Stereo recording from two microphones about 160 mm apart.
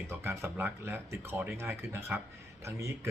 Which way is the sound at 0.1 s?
15° right (ahead or behind).